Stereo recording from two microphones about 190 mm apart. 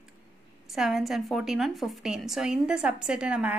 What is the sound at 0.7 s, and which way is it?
A woman's voice, centre (ahead or behind).